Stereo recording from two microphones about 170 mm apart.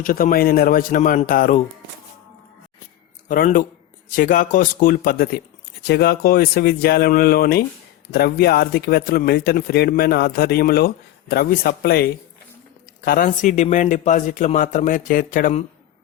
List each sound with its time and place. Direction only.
0.0 s speech: 55° left (ahead or behind)
3.2 s speech: 55° left (ahead or behind)
5.9 s speech: 70° left (ahead or behind)
13.1 s speech: 50° left (ahead or behind)